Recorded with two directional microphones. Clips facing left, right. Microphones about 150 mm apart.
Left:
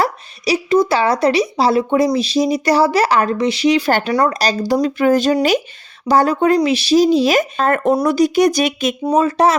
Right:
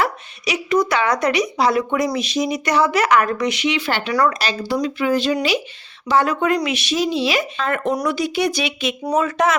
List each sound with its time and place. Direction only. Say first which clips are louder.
0.0 s a woman's voice: left 3 dB; 35° left (ahead or behind)
4.1 s speech: right 1 dB; 25° left (ahead or behind)
4.4 s a woman's voice: left 5 dB; 40° left (ahead or behind)
9.0 s a woman's voice: left 4 dB; 30° left (ahead or behind)